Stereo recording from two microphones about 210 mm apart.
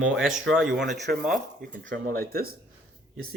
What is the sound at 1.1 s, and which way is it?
Speech, 45° right (ahead or behind).